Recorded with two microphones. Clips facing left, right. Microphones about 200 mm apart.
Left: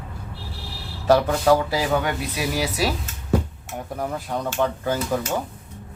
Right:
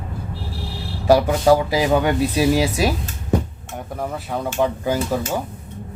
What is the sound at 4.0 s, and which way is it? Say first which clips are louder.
Speech: right 2 dB; centre (ahead or behind).